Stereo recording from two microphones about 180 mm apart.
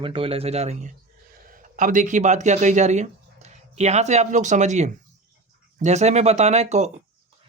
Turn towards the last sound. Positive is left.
turn(degrees=-40)  # may be behind; listen again after turning